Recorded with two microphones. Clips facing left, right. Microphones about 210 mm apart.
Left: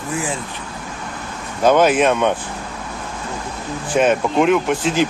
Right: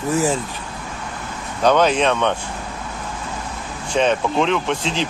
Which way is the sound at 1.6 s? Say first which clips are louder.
Left 2 dB; 5° left (ahead or behind).